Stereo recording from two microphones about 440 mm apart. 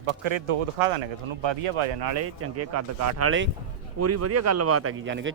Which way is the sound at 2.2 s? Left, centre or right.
Right.